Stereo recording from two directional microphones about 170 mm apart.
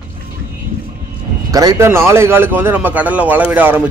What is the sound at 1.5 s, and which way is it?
A man's voice, 20° right (ahead or behind).